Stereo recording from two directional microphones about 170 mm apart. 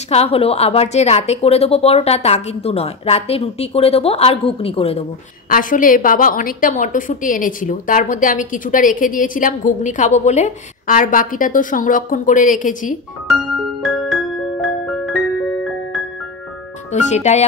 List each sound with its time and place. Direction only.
0.1 s a woman's voice: 35° left (ahead or behind)
5.5 s a woman's voice: 55° left (ahead or behind)
13.8 s music: centre (ahead or behind)
16.9 s a woman's voice: 40° left (ahead or behind)